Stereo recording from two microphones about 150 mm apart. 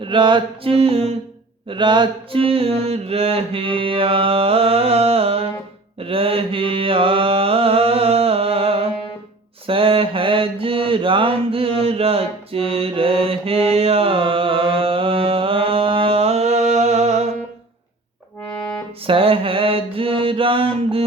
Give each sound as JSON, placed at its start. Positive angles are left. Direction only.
{"t": 0.0, "sound": "mantra", "side_deg": -30}
{"t": 19.0, "sound": "mantra", "side_deg": -35}